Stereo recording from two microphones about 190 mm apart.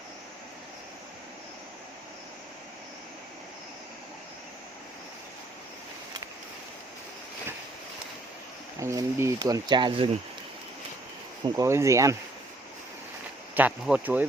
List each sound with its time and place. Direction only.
8.8 s speech: 15° right (ahead or behind)
11.4 s speech: 15° right (ahead or behind)
13.5 s speech: 10° right (ahead or behind)